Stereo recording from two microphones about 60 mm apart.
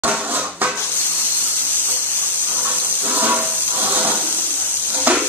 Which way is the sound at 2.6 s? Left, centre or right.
Right.